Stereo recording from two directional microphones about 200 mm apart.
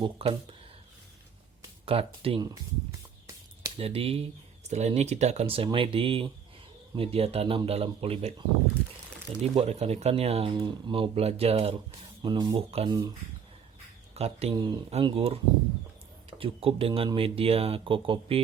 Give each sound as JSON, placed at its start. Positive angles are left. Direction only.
{"t": 0.0, "sound": "speech", "side_deg": -25}
{"t": 1.8, "sound": "speech", "side_deg": -30}
{"t": 3.8, "sound": "speech", "side_deg": -30}
{"t": 9.4, "sound": "speech", "side_deg": -30}
{"t": 14.1, "sound": "speech", "side_deg": -30}
{"t": 16.4, "sound": "speech", "side_deg": -30}